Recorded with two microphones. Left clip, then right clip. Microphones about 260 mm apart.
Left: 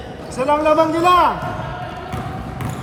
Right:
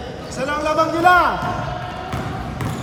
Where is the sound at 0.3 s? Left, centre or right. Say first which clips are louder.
Left 6 dB; left.